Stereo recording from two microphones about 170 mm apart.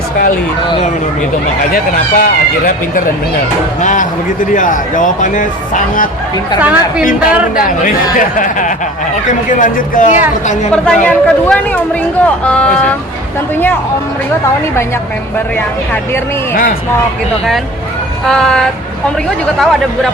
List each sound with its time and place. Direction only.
1.7 s a man's voice: 50° left (ahead or behind)
6.6 s speech: 10° right (ahead or behind)
7.0 s a man's voice: 55° left (ahead or behind)
10.7 s speech: 5° left (ahead or behind)
18.3 s speech: 5° left (ahead or behind)